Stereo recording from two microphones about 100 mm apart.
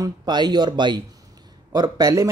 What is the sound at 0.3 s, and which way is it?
Speech, 45° right (ahead or behind).